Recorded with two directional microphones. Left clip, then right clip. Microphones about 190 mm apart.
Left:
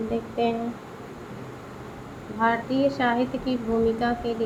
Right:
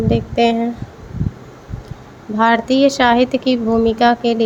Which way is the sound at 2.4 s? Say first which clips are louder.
Right 10 dB; 50° right (ahead or behind).